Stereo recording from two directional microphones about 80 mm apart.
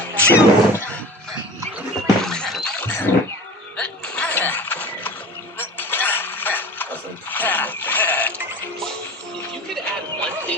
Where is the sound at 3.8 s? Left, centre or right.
Centre.